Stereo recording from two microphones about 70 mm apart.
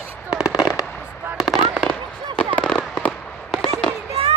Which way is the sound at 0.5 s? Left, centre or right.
Left.